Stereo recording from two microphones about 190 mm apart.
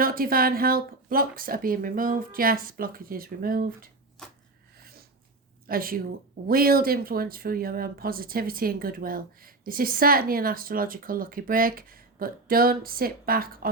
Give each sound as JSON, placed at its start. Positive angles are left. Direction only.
{"t": 0.0, "sound": "speech", "side_deg": -50}
{"t": 4.8, "sound": "snort", "side_deg": -50}
{"t": 5.6, "sound": "speech", "side_deg": -50}